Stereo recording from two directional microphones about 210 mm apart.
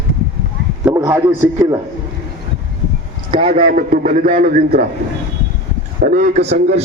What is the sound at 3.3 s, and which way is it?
A man's voice, 30° right (ahead or behind).